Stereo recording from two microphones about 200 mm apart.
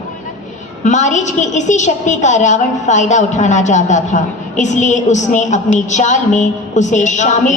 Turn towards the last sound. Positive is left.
turn(degrees=35)  # may be behind; listen again after turning